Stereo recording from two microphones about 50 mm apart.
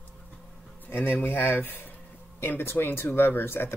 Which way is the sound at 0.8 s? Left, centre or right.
Left.